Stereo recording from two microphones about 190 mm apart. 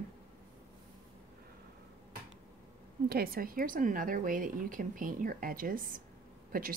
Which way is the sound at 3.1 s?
55° right (ahead or behind).